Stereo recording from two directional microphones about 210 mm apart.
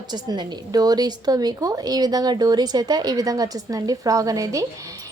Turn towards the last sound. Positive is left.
turn(degrees=-15)  # may be behind; listen again after turning